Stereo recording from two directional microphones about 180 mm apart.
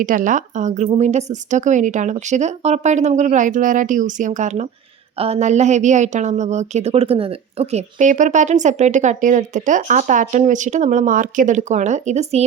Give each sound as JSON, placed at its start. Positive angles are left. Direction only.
{"t": 0.0, "sound": "a woman's voice", "side_deg": -45}